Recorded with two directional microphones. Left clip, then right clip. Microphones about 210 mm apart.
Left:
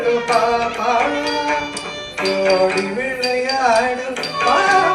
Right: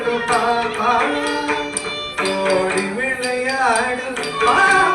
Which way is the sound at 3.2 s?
20° left (ahead or behind).